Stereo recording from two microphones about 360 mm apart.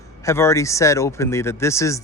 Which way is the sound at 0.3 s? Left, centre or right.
Centre.